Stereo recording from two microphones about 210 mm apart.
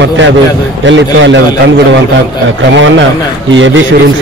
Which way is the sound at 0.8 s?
60° right (ahead or behind).